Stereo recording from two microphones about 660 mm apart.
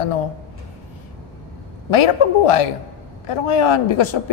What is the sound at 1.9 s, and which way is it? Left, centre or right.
A man's voice, left.